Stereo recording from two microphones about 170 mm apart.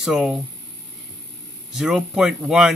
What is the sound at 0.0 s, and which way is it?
Speech, centre (ahead or behind).